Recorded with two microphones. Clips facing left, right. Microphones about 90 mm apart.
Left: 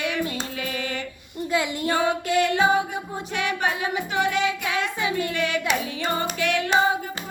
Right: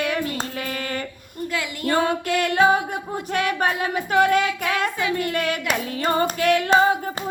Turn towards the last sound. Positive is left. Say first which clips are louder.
# right 4 dB
turn(degrees=-40)  # may be behind; listen again after turning